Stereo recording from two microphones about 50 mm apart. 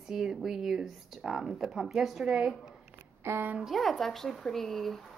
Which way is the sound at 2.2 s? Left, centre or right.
Centre.